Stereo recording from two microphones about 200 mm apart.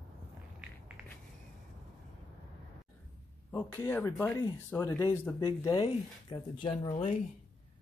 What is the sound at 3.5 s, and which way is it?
Speech, 10° left (ahead or behind).